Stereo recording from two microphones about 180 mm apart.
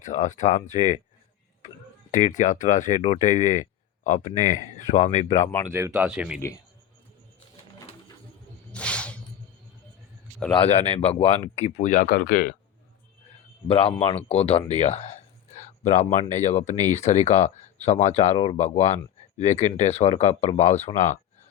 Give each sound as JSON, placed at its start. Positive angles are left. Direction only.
{"t": 0.0, "sound": "speech", "side_deg": 45}
{"t": 2.0, "sound": "speech", "side_deg": 40}
{"t": 5.7, "sound": "speech", "side_deg": -15}
{"t": 6.1, "sound": "speech", "side_deg": -5}
{"t": 8.7, "sound": "a sound", "side_deg": 5}
{"t": 10.5, "sound": "speech", "side_deg": 35}
{"t": 13.7, "sound": "speech", "side_deg": 30}